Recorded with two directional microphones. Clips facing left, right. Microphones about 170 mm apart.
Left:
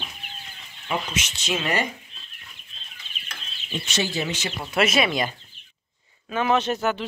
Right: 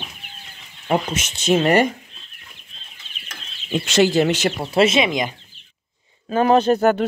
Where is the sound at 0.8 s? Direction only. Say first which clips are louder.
Right 7 dB; 50° right (ahead or behind).